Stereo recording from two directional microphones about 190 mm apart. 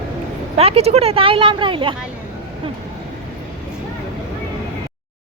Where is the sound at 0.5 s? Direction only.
35° right (ahead or behind).